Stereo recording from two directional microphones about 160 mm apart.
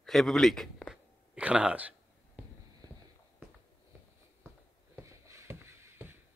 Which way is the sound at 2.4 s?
10° right (ahead or behind).